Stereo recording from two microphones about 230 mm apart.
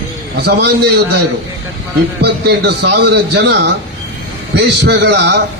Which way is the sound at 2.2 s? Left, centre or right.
Right.